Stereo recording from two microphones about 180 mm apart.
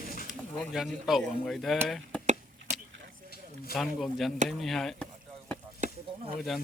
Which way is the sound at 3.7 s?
Centre (ahead or behind).